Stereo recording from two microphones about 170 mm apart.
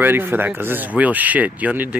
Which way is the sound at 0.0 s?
15° right (ahead or behind).